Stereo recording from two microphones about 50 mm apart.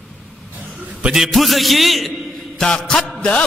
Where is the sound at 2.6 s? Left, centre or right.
Centre.